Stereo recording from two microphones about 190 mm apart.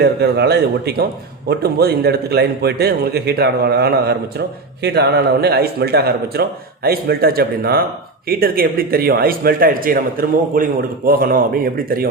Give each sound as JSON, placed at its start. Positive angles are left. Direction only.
{"t": 0.0, "sound": "a man's voice", "side_deg": -60}